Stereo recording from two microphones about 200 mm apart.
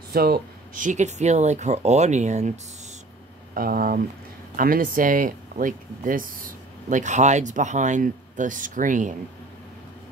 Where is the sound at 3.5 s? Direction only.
45° right (ahead or behind).